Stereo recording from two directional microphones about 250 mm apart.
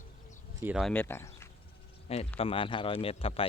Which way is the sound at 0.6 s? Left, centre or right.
Centre.